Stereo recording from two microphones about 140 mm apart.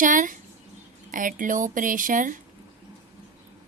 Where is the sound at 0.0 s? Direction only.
70° right (ahead or behind).